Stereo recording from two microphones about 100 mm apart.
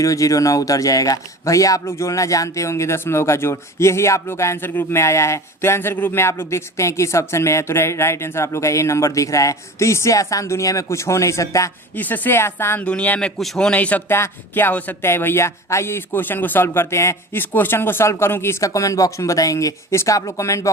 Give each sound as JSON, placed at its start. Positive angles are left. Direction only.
{"t": 0.0, "sound": "speech", "side_deg": 35}
{"t": 11.9, "sound": "speech", "side_deg": 15}
{"t": 12.8, "sound": "a man's voice", "side_deg": 10}